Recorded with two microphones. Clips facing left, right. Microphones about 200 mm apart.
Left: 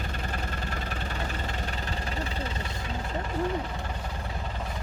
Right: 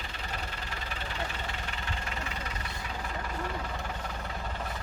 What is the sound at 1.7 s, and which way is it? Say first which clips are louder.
Vehicle: left 4 dB; 40° left (ahead or behind).